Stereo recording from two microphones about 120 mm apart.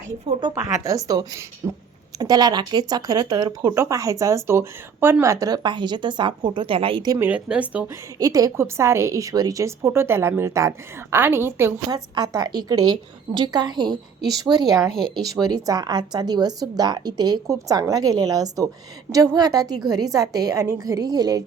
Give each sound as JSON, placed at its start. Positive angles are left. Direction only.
{"t": 0.3, "sound": "speech", "side_deg": -40}
{"t": 0.9, "sound": "a woman's voice", "side_deg": -30}
{"t": 7.3, "sound": "speech", "side_deg": -10}
{"t": 8.2, "sound": "a woman's voice", "side_deg": -30}
{"t": 11.9, "sound": "speech", "side_deg": -35}